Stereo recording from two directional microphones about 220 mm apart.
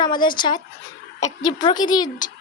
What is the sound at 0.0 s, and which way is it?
Speech, 20° left (ahead or behind).